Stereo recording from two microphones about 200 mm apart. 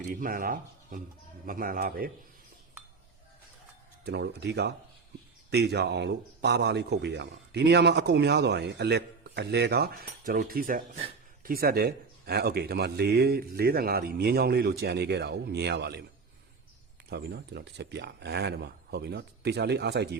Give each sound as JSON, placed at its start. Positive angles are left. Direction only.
{"t": 0.0, "sound": "a man's voice", "side_deg": -45}
{"t": 4.0, "sound": "a man's voice", "side_deg": -55}
{"t": 17.1, "sound": "a man's voice", "side_deg": -55}